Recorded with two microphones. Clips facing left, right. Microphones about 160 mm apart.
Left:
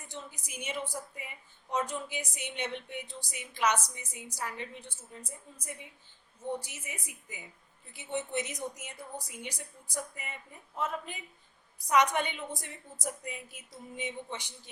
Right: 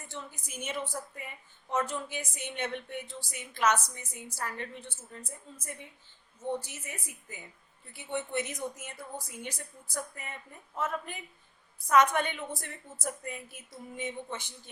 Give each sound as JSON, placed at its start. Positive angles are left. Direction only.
{"t": 0.7, "sound": "a woman's voice", "side_deg": 10}